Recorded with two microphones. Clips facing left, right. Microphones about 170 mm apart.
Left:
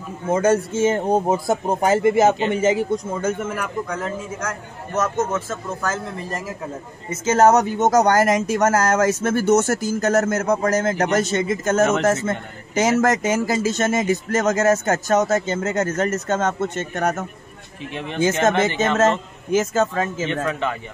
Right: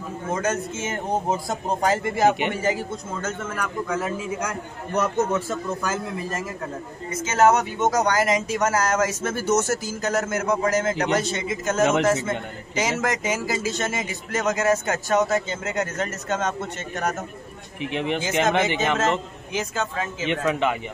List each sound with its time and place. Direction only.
0.3 s a man's voice: 30° left (ahead or behind); by 3.7 s 10° left (ahead or behind)
3.9 s speech: 10° right (ahead or behind)
7.2 s speech: 40° left (ahead or behind)
11.8 s speech: 15° right (ahead or behind)
13.0 s speech: 50° left (ahead or behind)
17.9 s speech: 15° right (ahead or behind)
19.5 s speech: 45° left (ahead or behind)